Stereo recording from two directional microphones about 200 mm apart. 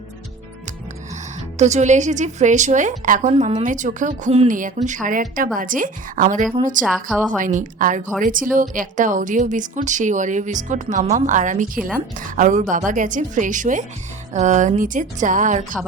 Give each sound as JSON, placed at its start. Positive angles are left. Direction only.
{"t": 1.5, "sound": "a woman's voice", "side_deg": -35}